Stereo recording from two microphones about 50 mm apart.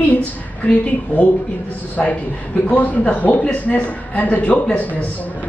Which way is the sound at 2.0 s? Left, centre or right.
Centre.